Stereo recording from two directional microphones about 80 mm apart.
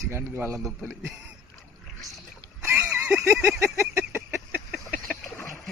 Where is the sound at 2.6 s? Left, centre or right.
Right.